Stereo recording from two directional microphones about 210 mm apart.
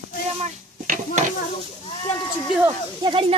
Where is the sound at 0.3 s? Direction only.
35° right (ahead or behind).